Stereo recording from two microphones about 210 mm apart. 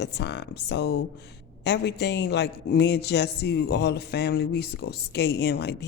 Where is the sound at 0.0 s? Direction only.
55° left (ahead or behind).